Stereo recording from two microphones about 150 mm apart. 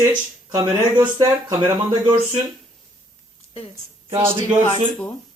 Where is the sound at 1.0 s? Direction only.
15° right (ahead or behind).